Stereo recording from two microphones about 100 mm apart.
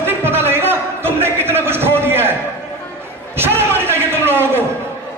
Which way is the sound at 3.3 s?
25° right (ahead or behind).